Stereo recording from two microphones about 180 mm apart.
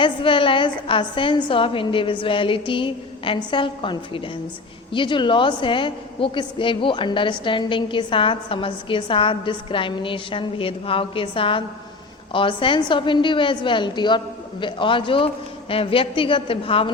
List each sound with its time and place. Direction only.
0.0 s a woman's voice: 30° left (ahead or behind)